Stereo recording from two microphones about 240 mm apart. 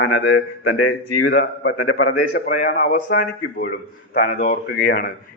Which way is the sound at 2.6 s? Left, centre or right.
Left.